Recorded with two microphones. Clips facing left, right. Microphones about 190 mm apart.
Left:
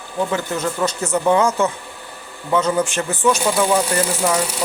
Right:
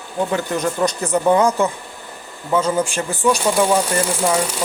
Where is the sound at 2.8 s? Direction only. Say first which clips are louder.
Even; 30° right (ahead or behind).